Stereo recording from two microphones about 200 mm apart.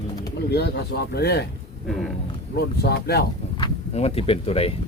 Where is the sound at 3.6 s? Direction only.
30° left (ahead or behind).